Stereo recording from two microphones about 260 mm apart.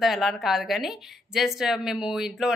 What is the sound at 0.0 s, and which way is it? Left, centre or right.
A woman's voice, centre.